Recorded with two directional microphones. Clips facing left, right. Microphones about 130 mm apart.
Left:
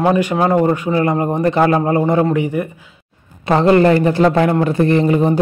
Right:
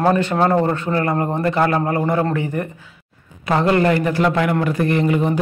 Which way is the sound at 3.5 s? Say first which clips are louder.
Left 5 dB; 25° left (ahead or behind).